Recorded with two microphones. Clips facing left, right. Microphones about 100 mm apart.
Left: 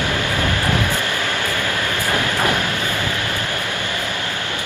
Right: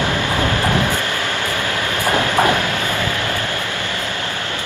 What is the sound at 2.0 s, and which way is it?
Train, 20° right (ahead or behind).